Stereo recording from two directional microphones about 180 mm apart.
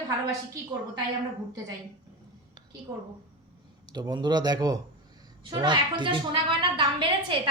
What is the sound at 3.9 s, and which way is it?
A woman's voice, 25° right (ahead or behind).